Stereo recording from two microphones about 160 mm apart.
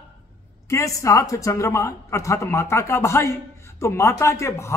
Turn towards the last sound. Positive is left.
turn(degrees=15)  # may be behind; listen again after turning